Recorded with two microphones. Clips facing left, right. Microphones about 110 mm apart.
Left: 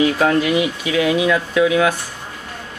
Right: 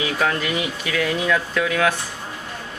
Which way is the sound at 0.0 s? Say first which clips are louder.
Left 7 dB; 45° left (ahead or behind).